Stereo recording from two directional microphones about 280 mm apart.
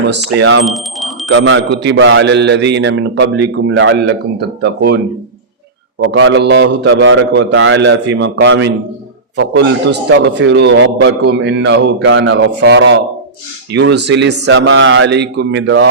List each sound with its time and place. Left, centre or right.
0.3 s a man's voice: right
0.6 s speech: centre
1.3 s a man's voice: right
6.1 s a man's voice: right